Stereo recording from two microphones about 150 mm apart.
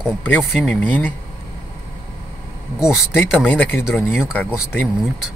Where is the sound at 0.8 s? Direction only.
10° left (ahead or behind).